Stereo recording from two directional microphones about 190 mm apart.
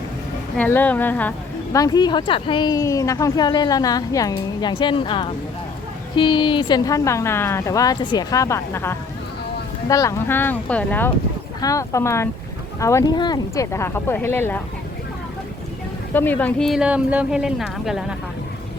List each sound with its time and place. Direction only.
0.5 s a woman's voice: 10° left (ahead or behind)
16.1 s speech: 10° left (ahead or behind)